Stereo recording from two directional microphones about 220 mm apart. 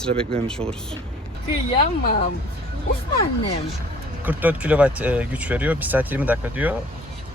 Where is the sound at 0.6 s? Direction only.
25° right (ahead or behind).